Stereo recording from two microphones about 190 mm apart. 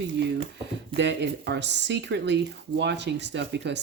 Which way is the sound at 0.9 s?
65° right (ahead or behind).